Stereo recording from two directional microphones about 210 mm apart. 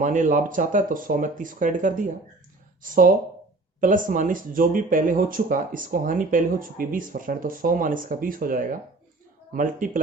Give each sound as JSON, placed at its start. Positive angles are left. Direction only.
{"t": 0.0, "sound": "speech", "side_deg": -35}